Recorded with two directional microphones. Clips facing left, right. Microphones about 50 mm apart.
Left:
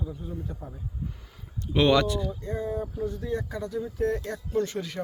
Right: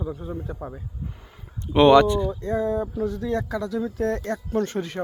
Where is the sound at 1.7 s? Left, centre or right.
Right.